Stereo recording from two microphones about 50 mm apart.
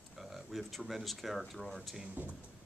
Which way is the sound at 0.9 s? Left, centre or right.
Centre.